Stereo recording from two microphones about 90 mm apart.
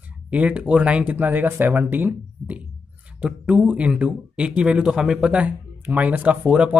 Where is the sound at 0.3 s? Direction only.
15° right (ahead or behind).